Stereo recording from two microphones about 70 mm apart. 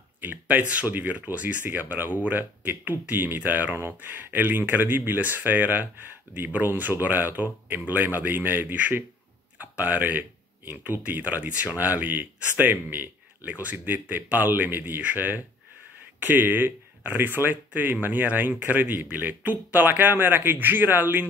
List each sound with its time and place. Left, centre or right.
0.2 s speech: right
9.6 s a sound: right
11.1 s speech: right